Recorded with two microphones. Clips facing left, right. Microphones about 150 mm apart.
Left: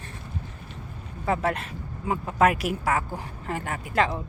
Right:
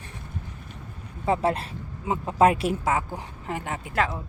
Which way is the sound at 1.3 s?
30° right (ahead or behind).